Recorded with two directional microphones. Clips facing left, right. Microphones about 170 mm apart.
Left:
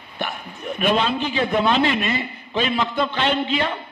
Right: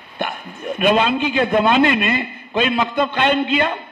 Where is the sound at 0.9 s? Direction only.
50° right (ahead or behind).